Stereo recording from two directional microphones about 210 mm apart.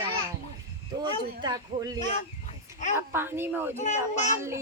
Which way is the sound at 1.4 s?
20° right (ahead or behind).